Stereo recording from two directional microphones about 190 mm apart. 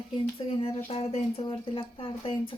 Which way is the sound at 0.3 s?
30° left (ahead or behind).